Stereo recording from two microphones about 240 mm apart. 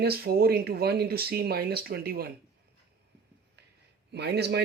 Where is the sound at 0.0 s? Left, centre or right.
Right.